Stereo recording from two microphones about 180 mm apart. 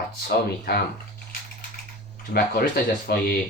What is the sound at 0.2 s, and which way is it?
Speech, 60° left (ahead or behind).